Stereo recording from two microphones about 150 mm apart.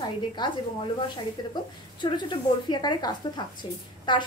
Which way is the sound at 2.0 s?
30° left (ahead or behind).